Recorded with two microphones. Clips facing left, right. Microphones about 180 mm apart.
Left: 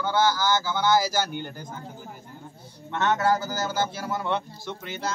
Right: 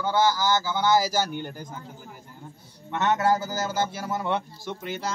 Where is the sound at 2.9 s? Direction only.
5° right (ahead or behind).